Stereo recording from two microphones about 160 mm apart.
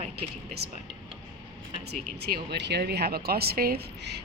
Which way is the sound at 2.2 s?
85° right.